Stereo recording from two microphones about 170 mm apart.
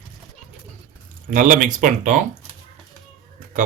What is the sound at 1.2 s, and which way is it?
Speech, 50° right (ahead or behind).